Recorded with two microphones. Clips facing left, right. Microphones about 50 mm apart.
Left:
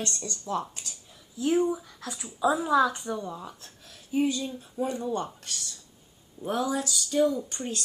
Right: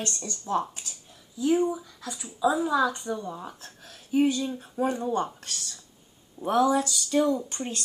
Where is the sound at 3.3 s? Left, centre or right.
Centre.